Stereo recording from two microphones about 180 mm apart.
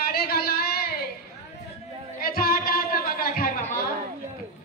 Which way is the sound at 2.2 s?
55° left (ahead or behind).